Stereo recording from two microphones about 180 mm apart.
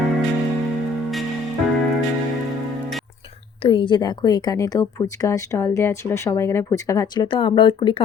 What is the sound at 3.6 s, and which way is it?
Speech, 30° left (ahead or behind).